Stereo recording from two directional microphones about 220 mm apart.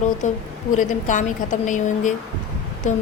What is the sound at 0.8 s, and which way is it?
Speech, 35° left (ahead or behind).